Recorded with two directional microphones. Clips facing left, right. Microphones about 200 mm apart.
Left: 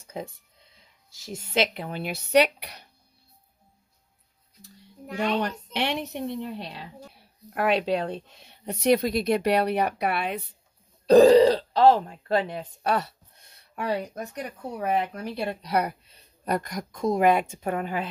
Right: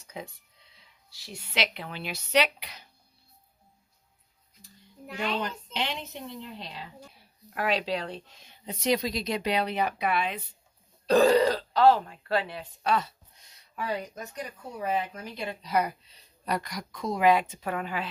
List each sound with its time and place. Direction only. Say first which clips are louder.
0.2 s speech: left 4 dB; 45° left (ahead or behind)
5.4 s a woman's voice: left 5 dB; 70° left (ahead or behind)
7.5 s speech: left 5 dB; 55° left (ahead or behind)
11.1 s speech: left 6 dB; 35° left (ahead or behind)
12.8 s speech: left 1 dB; 60° left (ahead or behind); by 18.0 s 45° left (ahead or behind)